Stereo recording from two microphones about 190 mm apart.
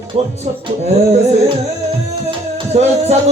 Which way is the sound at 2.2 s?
35° right (ahead or behind).